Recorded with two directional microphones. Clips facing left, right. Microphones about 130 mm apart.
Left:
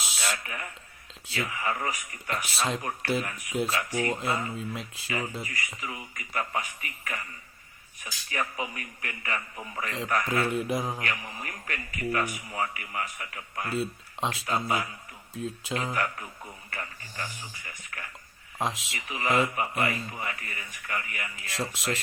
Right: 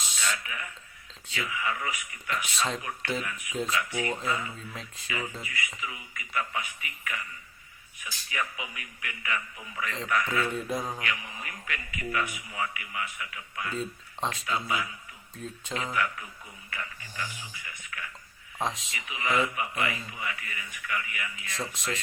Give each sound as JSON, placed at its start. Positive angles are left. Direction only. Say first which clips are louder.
{"t": 0.2, "sound": "speech", "louder": "even", "side_deg": 40}
{"t": 4.5, "sound": "speech", "louder": "left 6 dB", "side_deg": 10}
{"t": 5.0, "sound": "speech", "louder": "left 2 dB", "side_deg": 35}
{"t": 10.5, "sound": "speech", "louder": "left 3 dB", "side_deg": 10}
{"t": 11.0, "sound": "speech", "louder": "left 1 dB", "side_deg": 40}
{"t": 18.6, "sound": "speech", "louder": "left 1 dB", "side_deg": 5}
{"t": 18.9, "sound": "speech", "louder": "left 2 dB", "side_deg": 40}